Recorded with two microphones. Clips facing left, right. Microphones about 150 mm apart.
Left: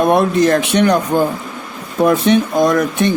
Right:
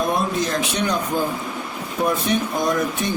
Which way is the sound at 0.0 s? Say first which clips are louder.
Left 9 dB; 70° left (ahead or behind).